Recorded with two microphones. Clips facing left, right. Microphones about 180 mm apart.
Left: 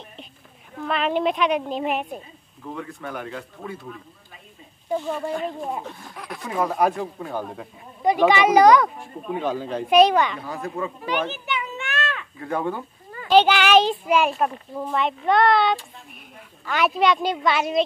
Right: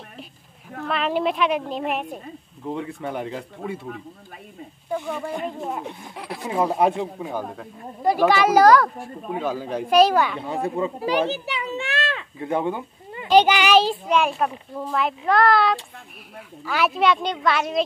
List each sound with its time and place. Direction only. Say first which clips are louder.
0.8 s speech: left 1 dB; centre (ahead or behind)
2.6 s speech: right 4 dB; 25° right (ahead or behind)
5.9 s speech: right 2 dB; 25° right (ahead or behind)
7.2 s speech: right 1 dB; 10° right (ahead or behind)
10.4 s a child's voice: right 4 dB; 25° right (ahead or behind); by 17.8 s centre (ahead or behind)